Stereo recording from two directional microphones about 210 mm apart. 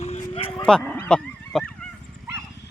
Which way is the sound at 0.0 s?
30° left (ahead or behind).